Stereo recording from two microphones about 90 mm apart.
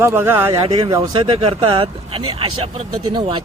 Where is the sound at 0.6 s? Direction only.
80° right.